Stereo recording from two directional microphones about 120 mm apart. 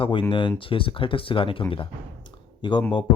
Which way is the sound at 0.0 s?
45° left (ahead or behind).